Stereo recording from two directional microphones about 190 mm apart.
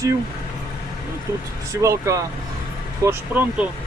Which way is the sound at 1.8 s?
15° right (ahead or behind).